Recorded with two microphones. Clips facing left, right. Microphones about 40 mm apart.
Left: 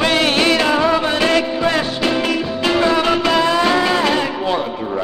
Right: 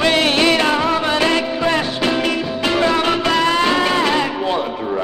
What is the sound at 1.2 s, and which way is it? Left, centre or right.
Music, left.